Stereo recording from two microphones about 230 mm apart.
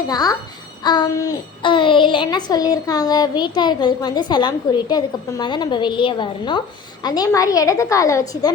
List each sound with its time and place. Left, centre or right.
0.1 s a woman's voice: centre
0.9 s child singing: centre
7.0 s a woman's voice: centre